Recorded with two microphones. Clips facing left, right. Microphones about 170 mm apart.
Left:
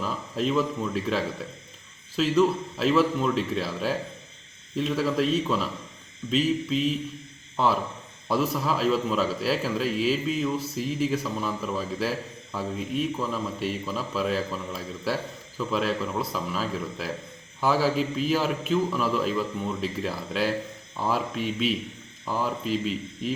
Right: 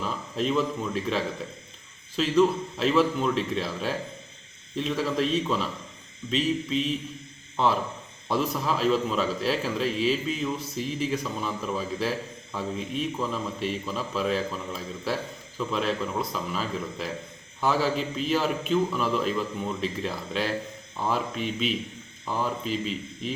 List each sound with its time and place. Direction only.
0.0 s a man's voice: centre (ahead or behind)